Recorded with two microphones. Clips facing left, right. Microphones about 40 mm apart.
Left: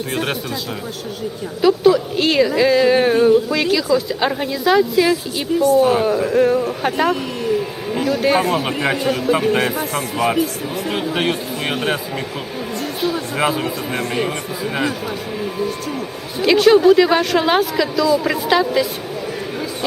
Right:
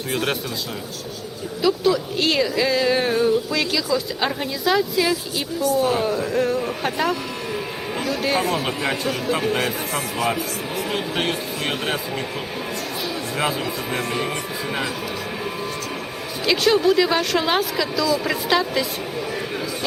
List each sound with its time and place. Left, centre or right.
0.1 s a woman's voice: centre
1.6 s a woman's voice: centre
8.8 s speech: left
9.1 s a woman's voice: centre
9.5 s speech: left
10.8 s a woman's voice: centre
13.3 s a woman's voice: centre
16.4 s a woman's voice: centre